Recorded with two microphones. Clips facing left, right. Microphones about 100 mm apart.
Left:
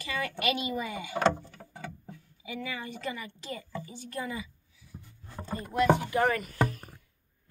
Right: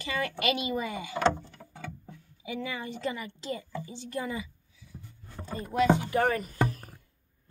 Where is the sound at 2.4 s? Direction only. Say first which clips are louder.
Right 2 dB; 25° right (ahead or behind).